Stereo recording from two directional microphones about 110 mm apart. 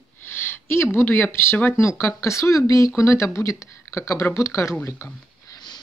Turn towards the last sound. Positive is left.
turn(degrees=35)  # may be behind; listen again after turning